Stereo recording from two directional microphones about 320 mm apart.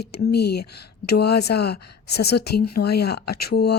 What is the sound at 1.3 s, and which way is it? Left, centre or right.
Speech, left.